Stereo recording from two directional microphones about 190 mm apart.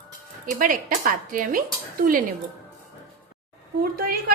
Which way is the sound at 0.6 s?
45° right (ahead or behind).